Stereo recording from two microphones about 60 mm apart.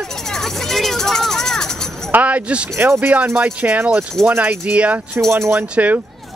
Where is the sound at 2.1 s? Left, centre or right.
Right.